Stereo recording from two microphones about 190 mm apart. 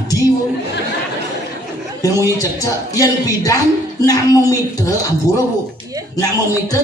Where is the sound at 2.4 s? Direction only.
20° left (ahead or behind).